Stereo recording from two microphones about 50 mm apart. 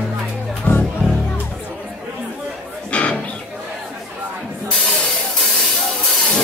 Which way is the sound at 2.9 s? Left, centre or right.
Left.